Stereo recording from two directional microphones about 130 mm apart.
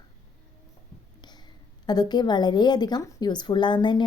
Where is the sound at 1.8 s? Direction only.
35° left (ahead or behind).